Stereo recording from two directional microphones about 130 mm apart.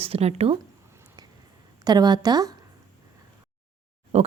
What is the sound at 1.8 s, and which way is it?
Speech, 30° right (ahead or behind).